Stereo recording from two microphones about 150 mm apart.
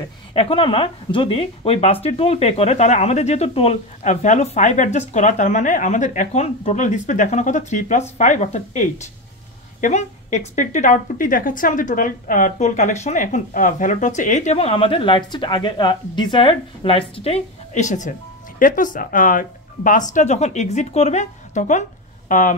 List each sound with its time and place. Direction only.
0.3 s a woman's voice: 35° left (ahead or behind); by 22.5 s 60° left (ahead or behind)